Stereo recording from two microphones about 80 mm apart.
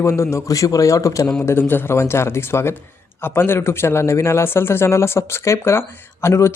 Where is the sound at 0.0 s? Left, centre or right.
Left.